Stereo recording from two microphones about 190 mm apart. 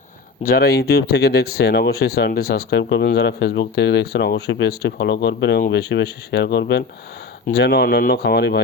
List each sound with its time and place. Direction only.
0.4 s speech: 55° left (ahead or behind)